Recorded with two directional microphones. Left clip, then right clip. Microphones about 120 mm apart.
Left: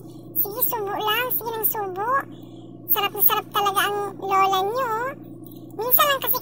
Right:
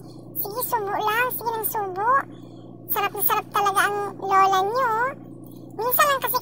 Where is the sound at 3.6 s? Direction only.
10° left (ahead or behind).